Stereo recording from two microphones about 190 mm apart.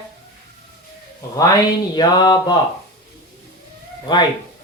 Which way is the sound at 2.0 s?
25° left (ahead or behind).